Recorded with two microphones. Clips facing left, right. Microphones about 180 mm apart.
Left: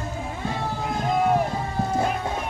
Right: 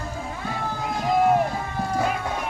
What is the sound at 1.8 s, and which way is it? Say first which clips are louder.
Music: left 1 dB; 25° left (ahead or behind).